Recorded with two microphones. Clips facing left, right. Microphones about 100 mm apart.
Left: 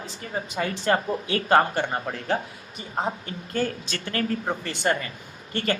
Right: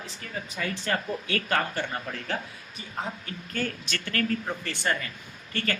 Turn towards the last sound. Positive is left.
turn(degrees=20)  # may be behind; listen again after turning